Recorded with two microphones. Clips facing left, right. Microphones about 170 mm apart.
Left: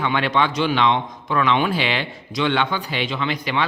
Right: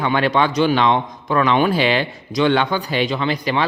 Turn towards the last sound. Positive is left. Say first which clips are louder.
# right 4 dB
turn(degrees=-35)  # may be behind; listen again after turning